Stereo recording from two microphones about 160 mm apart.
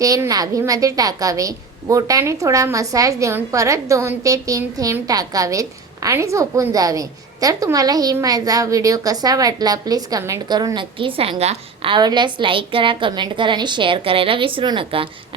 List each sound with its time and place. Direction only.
0.0 s a woman's voice: 20° right (ahead or behind)